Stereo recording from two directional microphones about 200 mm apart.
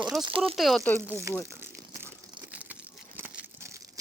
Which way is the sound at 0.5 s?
Centre (ahead or behind).